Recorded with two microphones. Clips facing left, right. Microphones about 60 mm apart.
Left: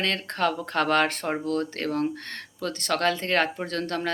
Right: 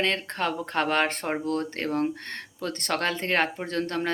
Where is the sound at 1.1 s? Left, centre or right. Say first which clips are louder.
Left 1 dB; right.